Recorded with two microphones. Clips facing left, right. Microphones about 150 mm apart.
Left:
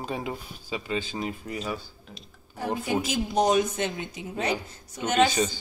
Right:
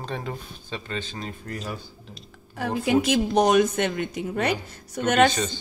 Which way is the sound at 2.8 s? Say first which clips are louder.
Right 9 dB; 75° right (ahead or behind).